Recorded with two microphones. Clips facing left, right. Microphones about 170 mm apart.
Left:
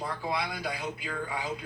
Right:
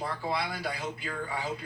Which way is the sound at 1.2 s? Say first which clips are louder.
Right 1 dB; 15° left (ahead or behind).